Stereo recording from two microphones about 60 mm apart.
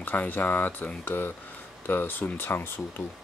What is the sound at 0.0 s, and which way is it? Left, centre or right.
Speech, left.